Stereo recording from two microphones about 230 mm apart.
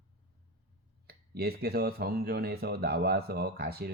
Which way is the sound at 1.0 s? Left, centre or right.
Right.